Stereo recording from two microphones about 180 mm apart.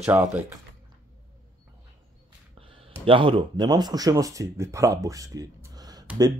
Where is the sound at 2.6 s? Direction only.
30° right (ahead or behind).